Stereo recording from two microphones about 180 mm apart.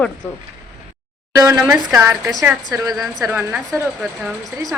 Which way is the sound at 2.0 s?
15° right (ahead or behind).